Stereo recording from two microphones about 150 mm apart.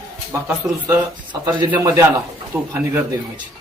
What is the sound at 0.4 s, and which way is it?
A man's voice, 10° right (ahead or behind).